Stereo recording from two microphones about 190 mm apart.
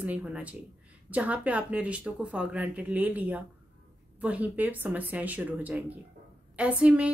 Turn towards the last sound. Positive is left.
turn(degrees=-5)  # may be behind; listen again after turning